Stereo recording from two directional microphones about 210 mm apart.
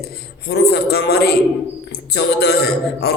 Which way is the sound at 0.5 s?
50° left (ahead or behind).